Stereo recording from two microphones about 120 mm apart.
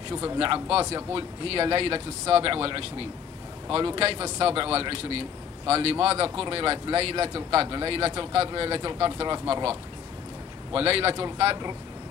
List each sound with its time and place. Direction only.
0.4 s speech: 50° right (ahead or behind)